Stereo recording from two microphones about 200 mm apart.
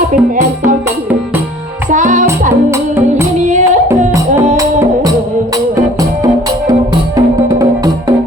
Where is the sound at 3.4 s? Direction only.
35° right (ahead or behind).